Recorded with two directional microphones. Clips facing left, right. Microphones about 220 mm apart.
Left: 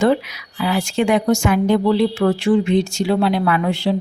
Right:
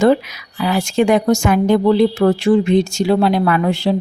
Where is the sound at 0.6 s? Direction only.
45° right (ahead or behind).